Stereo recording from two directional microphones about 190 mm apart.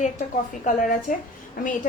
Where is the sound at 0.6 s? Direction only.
45° left (ahead or behind).